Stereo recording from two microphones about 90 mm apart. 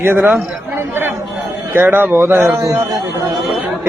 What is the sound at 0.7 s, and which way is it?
Chatter, 25° right (ahead or behind).